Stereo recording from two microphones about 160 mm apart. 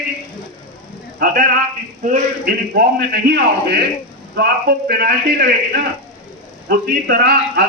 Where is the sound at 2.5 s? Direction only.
80° right.